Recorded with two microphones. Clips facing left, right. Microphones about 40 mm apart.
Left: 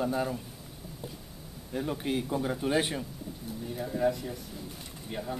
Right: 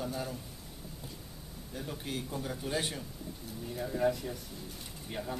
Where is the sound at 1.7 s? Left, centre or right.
Left.